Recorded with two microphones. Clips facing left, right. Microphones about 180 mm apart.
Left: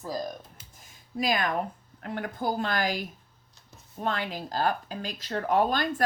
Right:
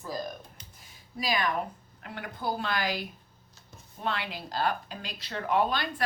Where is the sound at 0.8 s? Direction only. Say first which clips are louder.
Left 6 dB; 50° left (ahead or behind).